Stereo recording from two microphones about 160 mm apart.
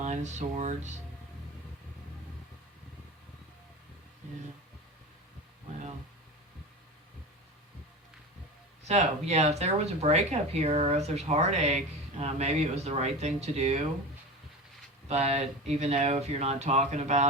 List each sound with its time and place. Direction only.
0.0 s speech: 45° right (ahead or behind)
8.9 s speech: 45° right (ahead or behind)
15.0 s speech: 45° right (ahead or behind)